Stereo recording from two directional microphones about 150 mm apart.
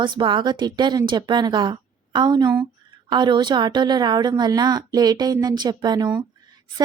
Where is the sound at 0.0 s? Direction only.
30° right (ahead or behind).